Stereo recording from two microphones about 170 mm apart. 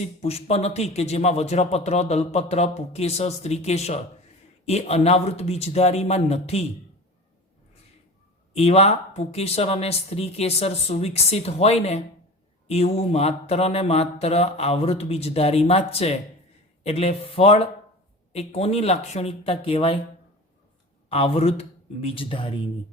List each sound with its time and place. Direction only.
0.0 s speech: 35° left (ahead or behind)
8.5 s speech: 35° left (ahead or behind)
21.1 s speech: 35° left (ahead or behind)